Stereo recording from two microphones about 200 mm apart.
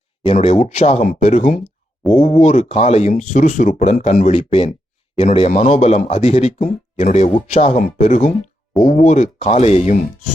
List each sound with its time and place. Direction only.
0.3 s speech: 30° left (ahead or behind)